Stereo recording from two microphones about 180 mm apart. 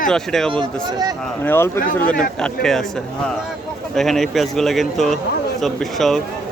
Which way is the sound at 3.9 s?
Centre (ahead or behind).